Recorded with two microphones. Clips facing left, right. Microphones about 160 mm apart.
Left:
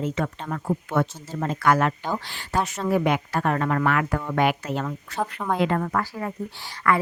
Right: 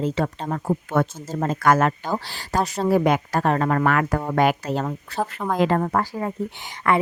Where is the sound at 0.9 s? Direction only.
45° right (ahead or behind).